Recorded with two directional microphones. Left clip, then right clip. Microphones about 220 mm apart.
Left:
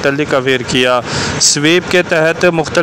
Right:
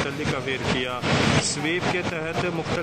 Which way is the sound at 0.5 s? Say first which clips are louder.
Left 14 dB; 40° left (ahead or behind).